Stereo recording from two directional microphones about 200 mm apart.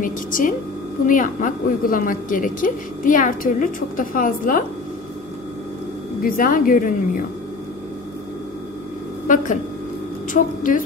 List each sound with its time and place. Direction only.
0.0 s a woman's voice: 40° left (ahead or behind)
6.2 s a woman's voice: 45° left (ahead or behind)
10.3 s a woman's voice: 40° left (ahead or behind)